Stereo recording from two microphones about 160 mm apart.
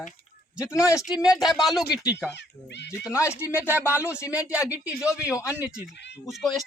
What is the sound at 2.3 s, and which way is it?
Speech, 90° left.